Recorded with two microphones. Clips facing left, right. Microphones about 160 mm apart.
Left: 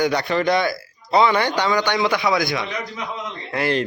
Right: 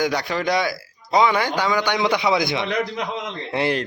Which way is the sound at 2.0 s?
20° right (ahead or behind).